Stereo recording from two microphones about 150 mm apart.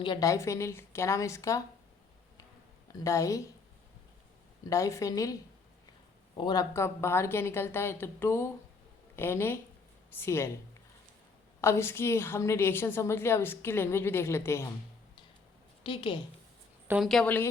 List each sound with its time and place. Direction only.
0.0 s speech: 25° left (ahead or behind)
3.0 s speech: 20° left (ahead or behind)
4.7 s a woman's voice: 20° left (ahead or behind)
11.6 s a woman's voice: 15° left (ahead or behind)
15.8 s a woman's voice: 35° left (ahead or behind)
16.9 s a woman's voice: centre (ahead or behind)